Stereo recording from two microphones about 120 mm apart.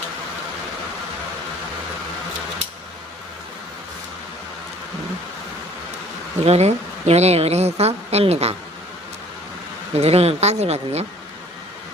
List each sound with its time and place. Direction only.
6.4 s a woman's voice: 65° right (ahead or behind)
9.9 s a woman's voice: 60° right (ahead or behind)